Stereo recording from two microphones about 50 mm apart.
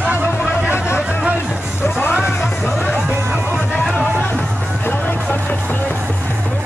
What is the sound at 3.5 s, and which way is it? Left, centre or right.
Music, centre.